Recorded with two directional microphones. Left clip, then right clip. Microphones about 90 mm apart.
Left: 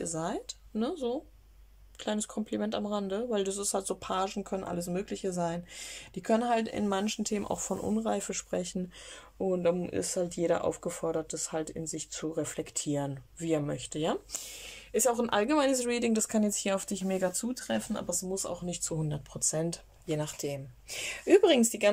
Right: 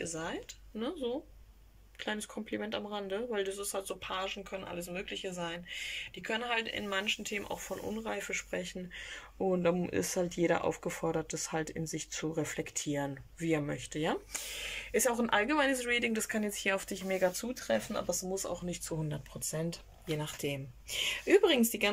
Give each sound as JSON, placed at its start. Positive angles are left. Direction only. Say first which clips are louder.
{"t": 0.0, "sound": "speech", "louder": "left 4 dB", "side_deg": 40}
{"t": 3.7, "sound": "speech", "louder": "left 5 dB", "side_deg": 55}
{"t": 6.1, "sound": "speech", "louder": "left 7 dB", "side_deg": 90}
{"t": 9.4, "sound": "speech", "louder": "left 2 dB", "side_deg": 15}
{"t": 17.2, "sound": "speech", "louder": "even", "side_deg": 20}